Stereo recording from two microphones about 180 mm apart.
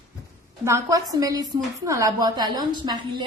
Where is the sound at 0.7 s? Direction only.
15° right (ahead or behind).